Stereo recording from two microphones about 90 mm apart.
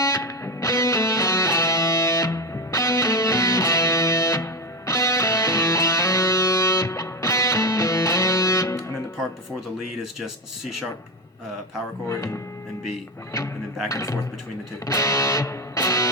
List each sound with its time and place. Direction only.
0.0 s music: 35° left (ahead or behind)
9.7 s speech: 5° right (ahead or behind)
12.0 s speech: 30° left (ahead or behind)
13.8 s speech: 35° left (ahead or behind)
14.8 s music: 35° left (ahead or behind)